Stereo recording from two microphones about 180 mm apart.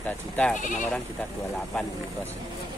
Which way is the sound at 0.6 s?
45° left (ahead or behind).